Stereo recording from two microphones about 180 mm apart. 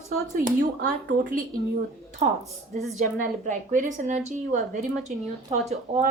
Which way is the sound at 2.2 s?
40° right (ahead or behind).